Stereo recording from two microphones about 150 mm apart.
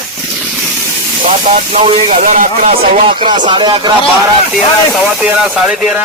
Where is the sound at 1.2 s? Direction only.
55° right (ahead or behind).